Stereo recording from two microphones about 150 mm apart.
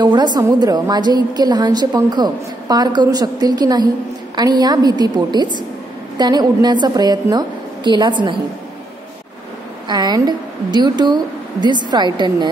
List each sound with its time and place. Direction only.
0.0 s a woman's voice: 30° right (ahead or behind)
9.8 s a woman's voice: 25° right (ahead or behind)